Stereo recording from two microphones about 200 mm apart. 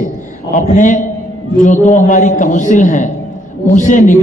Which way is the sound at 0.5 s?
40° left (ahead or behind).